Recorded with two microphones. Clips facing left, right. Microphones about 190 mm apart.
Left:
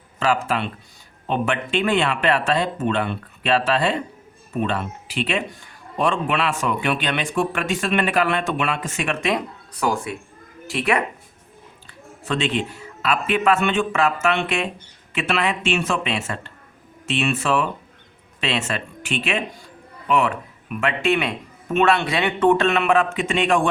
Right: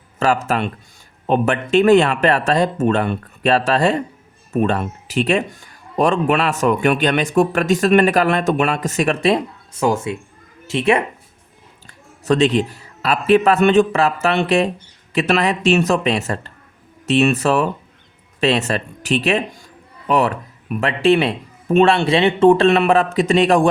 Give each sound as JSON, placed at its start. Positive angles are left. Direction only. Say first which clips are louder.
{"t": 0.4, "sound": "speech", "louder": "right 4 dB", "side_deg": -45}
{"t": 11.9, "sound": "speech", "louder": "right 9 dB", "side_deg": -40}